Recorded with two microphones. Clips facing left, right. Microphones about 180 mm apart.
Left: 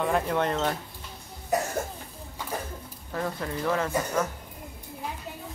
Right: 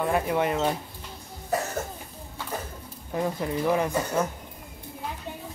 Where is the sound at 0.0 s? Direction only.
5° right (ahead or behind).